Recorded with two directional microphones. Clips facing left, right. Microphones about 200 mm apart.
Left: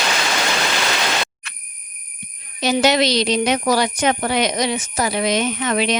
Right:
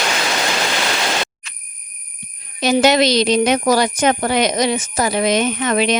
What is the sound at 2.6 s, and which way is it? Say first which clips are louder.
Speech: right 3 dB; 50° right (ahead or behind).